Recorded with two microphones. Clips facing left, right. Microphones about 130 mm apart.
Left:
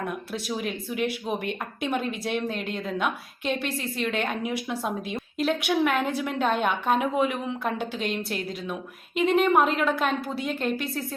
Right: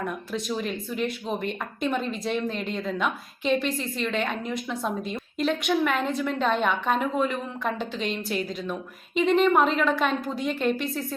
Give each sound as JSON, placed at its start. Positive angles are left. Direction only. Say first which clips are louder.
{"t": 0.3, "sound": "a woman's voice", "louder": "right 2 dB", "side_deg": 5}